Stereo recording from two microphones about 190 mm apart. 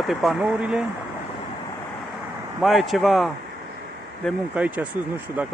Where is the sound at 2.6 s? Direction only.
Centre (ahead or behind).